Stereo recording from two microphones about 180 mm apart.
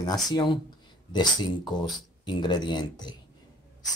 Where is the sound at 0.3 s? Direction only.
25° left (ahead or behind).